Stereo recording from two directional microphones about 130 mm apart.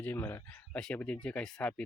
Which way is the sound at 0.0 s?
15° left (ahead or behind).